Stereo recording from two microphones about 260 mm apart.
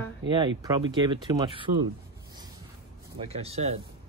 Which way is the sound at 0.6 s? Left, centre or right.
Centre.